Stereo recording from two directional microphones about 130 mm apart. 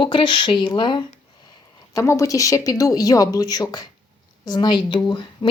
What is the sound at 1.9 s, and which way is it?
Speech, 20° left (ahead or behind).